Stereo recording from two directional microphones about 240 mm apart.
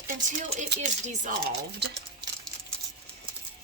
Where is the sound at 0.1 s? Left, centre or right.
Right.